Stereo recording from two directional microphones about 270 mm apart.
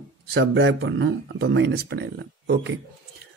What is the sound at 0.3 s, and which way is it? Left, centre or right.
Speech, right.